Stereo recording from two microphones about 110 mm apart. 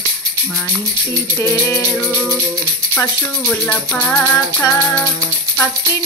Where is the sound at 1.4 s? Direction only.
25° left (ahead or behind).